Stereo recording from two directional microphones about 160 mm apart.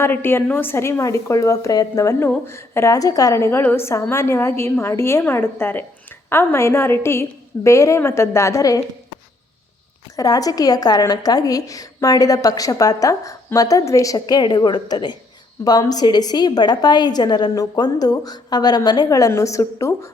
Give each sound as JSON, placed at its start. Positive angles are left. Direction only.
{"t": 0.0, "sound": "a woman's voice", "side_deg": 15}
{"t": 10.2, "sound": "a woman's voice", "side_deg": 25}